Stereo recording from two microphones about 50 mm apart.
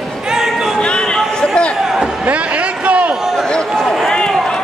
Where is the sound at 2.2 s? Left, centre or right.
Right.